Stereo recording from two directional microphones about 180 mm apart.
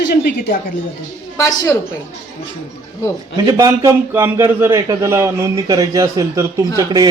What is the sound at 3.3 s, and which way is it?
A man's voice, 20° right (ahead or behind).